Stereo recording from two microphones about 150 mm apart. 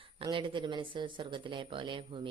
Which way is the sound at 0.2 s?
35° right (ahead or behind).